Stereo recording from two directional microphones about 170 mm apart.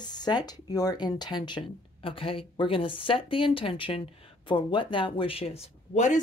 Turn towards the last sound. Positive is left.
turn(degrees=45)  # may be behind; listen again after turning